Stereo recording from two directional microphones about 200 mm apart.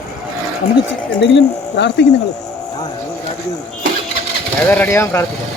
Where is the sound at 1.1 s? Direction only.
65° left (ahead or behind).